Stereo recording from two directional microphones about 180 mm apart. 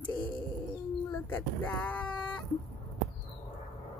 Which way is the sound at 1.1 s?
10° left (ahead or behind).